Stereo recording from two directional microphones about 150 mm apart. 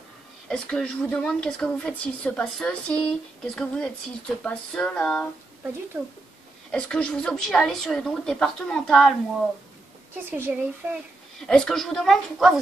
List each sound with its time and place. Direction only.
0.5 s speech: 5° left (ahead or behind)
5.9 s speech: 20° right (ahead or behind)
6.7 s speech: 5° left (ahead or behind)
10.3 s speech: 15° right (ahead or behind)
11.3 s speech: 5° left (ahead or behind)